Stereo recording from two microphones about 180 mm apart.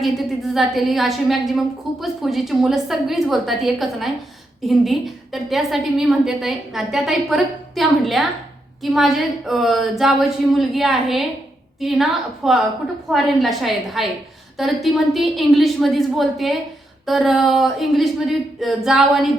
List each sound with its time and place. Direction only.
0.0 s a woman's voice: centre (ahead or behind)